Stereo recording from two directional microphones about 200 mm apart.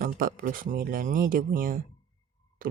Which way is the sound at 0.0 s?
45° right (ahead or behind).